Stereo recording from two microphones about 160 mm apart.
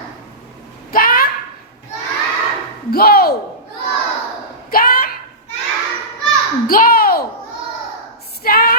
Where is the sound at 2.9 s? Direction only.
70° left (ahead or behind).